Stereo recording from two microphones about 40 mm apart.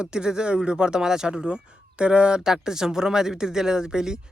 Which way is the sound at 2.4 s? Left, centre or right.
Centre.